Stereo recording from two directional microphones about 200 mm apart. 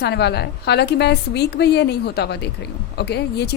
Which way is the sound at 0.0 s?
55° left (ahead or behind).